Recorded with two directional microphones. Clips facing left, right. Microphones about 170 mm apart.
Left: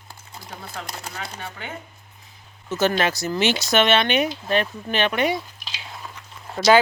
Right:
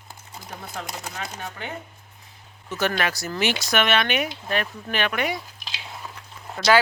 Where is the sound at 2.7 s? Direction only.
25° left (ahead or behind).